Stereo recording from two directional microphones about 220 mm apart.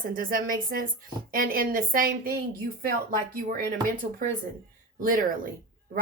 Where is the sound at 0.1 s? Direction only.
40° right (ahead or behind).